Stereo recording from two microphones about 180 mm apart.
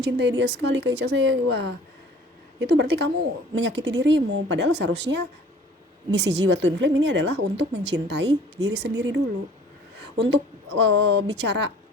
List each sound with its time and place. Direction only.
0.0 s a woman's voice: 70° right (ahead or behind)